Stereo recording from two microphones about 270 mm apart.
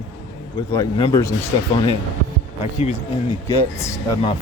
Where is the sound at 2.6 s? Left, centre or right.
Left.